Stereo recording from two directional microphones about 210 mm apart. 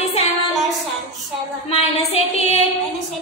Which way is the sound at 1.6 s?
30° left (ahead or behind).